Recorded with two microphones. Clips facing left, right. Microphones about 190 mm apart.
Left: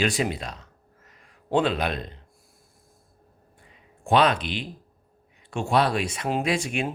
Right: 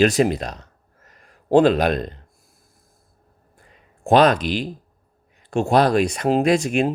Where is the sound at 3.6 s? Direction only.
40° right (ahead or behind).